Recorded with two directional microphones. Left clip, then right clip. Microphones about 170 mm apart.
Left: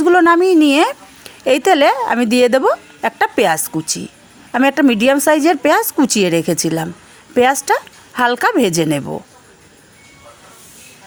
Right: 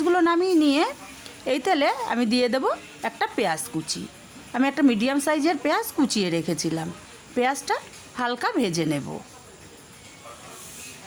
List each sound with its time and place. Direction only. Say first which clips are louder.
0.0 s a woman's voice: left 10 dB; 40° left (ahead or behind)